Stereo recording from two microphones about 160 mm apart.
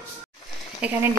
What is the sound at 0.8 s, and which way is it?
Speech, 10° right (ahead or behind).